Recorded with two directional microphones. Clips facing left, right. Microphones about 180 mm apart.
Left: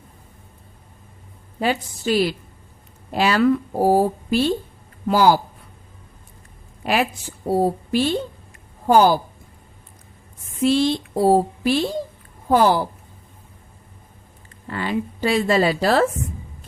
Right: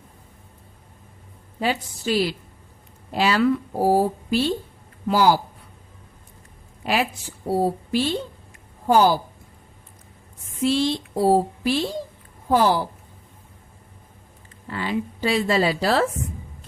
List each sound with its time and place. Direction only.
1.5 s speech: 50° left (ahead or behind)
6.8 s speech: 50° left (ahead or behind)
10.6 s speech: 55° left (ahead or behind)
14.7 s speech: 50° left (ahead or behind)